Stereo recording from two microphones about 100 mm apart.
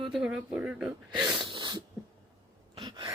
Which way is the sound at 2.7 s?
50° right (ahead or behind).